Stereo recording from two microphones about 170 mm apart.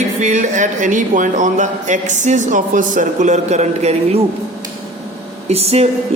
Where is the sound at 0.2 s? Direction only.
45° right (ahead or behind).